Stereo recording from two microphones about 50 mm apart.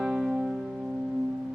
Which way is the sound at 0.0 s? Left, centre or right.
Centre.